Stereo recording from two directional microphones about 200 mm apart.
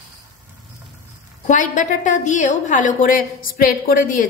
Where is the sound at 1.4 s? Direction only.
40° left (ahead or behind).